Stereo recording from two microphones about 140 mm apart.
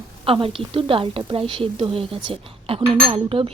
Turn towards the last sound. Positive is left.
turn(degrees=-40)  # may be behind; listen again after turning